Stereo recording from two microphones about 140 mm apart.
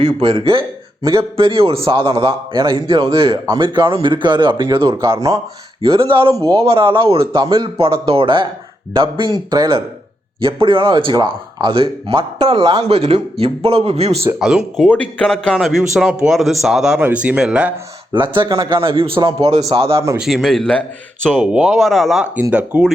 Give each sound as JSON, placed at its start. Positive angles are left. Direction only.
{"t": 0.0, "sound": "speech", "side_deg": -45}
{"t": 4.9, "sound": "speech", "side_deg": -20}
{"t": 5.8, "sound": "speech", "side_deg": -40}
{"t": 12.9, "sound": "speech", "side_deg": -50}
{"t": 14.3, "sound": "a man's voice", "side_deg": -5}
{"t": 18.1, "sound": "speech", "side_deg": -35}
{"t": 18.8, "sound": "speech", "side_deg": -40}
{"t": 20.1, "sound": "a man's voice", "side_deg": 0}